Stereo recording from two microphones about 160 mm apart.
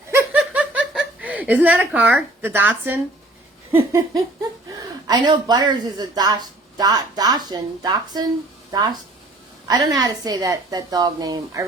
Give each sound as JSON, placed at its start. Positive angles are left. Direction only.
{"t": 0.3, "sound": "chuckle", "side_deg": -5}
{"t": 3.7, "sound": "a sound", "side_deg": -15}
{"t": 4.8, "sound": "a woman's voice", "side_deg": -25}